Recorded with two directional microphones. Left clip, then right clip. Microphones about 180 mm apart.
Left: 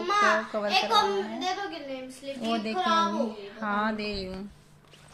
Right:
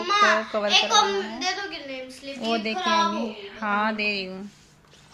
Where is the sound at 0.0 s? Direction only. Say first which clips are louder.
Right 4 dB; 15° left (ahead or behind).